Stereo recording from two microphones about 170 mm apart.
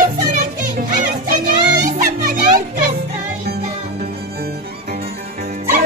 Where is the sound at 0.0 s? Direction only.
50° right (ahead or behind).